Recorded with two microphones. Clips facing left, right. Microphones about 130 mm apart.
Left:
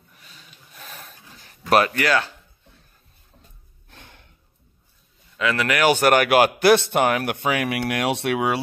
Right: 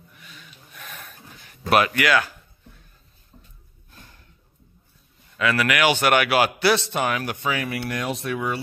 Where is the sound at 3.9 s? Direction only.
70° left (ahead or behind).